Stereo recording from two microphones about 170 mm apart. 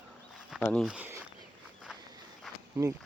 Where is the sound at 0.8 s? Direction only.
5° right (ahead or behind).